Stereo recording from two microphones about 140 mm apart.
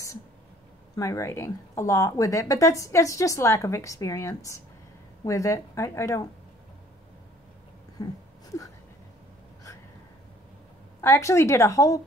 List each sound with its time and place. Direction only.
0.9 s speech: 20° left (ahead or behind)
11.0 s speech: 20° left (ahead or behind)